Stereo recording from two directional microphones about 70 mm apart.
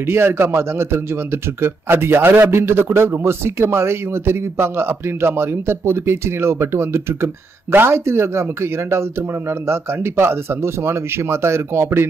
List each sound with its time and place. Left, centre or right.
0.0 s a man's voice: right